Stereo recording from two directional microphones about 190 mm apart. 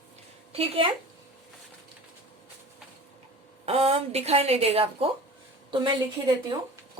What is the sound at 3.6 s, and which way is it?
Speech, 30° right (ahead or behind).